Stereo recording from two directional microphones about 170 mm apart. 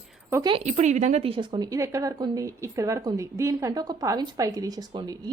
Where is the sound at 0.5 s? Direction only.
40° right (ahead or behind).